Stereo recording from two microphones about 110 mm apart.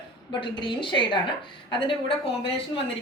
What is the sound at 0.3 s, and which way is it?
A woman's voice, 50° left (ahead or behind).